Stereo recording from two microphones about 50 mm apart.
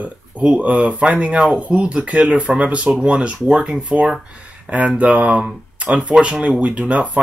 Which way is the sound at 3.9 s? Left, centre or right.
Centre.